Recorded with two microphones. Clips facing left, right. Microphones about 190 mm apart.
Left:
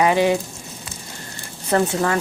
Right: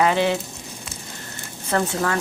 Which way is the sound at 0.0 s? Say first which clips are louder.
Left 2 dB; 15° left (ahead or behind).